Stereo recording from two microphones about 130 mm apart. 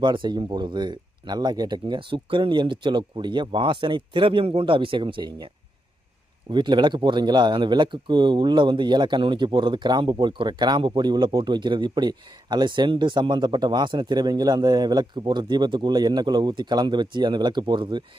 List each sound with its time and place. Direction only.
0.0 s speech: 35° right (ahead or behind)
6.5 s speech: 35° right (ahead or behind)